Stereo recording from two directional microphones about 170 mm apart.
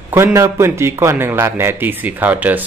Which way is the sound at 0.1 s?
15° right (ahead or behind).